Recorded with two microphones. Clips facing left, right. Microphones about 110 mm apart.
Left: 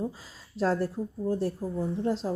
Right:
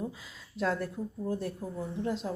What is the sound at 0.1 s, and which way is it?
Speech, 35° left (ahead or behind).